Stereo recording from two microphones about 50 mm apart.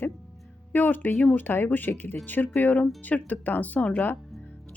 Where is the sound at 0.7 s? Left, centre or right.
Left.